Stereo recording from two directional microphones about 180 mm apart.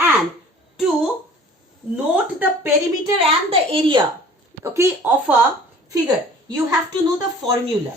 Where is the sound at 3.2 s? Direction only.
30° right (ahead or behind).